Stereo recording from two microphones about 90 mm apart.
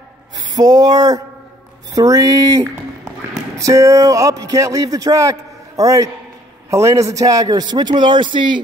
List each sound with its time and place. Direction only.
0.6 s a man's voice: 45° right (ahead or behind); by 8.5 s 60° right (ahead or behind)